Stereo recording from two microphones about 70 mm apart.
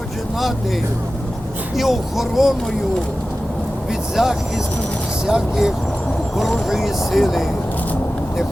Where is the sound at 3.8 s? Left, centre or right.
Centre.